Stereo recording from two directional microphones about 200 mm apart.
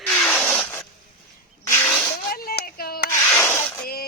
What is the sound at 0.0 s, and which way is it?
Zipper, 5° left (ahead or behind).